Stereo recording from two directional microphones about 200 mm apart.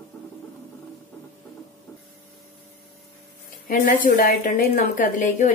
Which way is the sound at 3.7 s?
45° left (ahead or behind).